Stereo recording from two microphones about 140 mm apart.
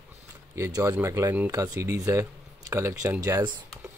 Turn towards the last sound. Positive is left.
turn(degrees=-20)  # may be behind; listen again after turning